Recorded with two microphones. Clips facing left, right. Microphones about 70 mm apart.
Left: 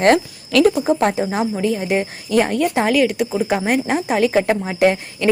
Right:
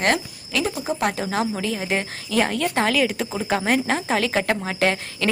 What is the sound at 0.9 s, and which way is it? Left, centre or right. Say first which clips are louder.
Speech: left 5 dB; left.